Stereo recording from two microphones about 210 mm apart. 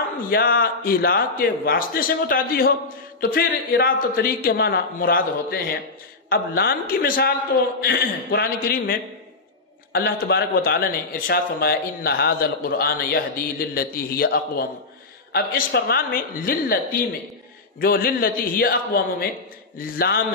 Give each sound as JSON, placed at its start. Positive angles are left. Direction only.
{"t": 0.2, "sound": "a man's voice", "side_deg": 45}